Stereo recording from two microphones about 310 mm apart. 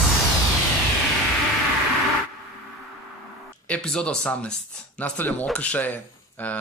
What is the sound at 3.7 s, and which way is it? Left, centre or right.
Speech, centre.